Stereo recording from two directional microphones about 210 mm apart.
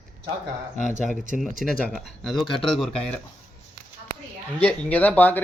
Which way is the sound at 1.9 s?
Centre (ahead or behind).